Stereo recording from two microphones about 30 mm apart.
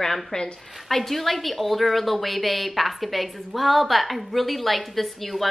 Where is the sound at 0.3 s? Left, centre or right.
Left.